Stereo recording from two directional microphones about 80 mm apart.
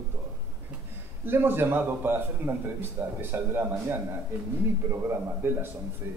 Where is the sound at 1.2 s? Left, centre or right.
Right.